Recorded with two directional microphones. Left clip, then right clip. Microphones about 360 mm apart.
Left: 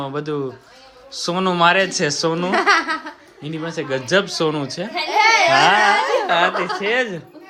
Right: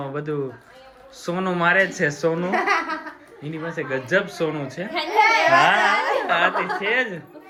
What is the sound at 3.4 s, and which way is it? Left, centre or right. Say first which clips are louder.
Speech: left 3 dB; centre.